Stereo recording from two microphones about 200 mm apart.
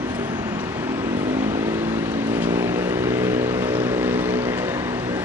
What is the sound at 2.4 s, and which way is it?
Vehicle, 10° right (ahead or behind).